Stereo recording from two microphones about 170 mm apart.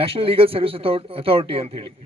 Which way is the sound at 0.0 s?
35° right (ahead or behind).